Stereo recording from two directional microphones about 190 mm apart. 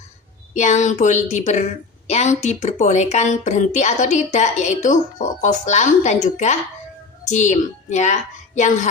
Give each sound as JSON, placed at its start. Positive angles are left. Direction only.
{"t": 0.5, "sound": "a woman's voice", "side_deg": 40}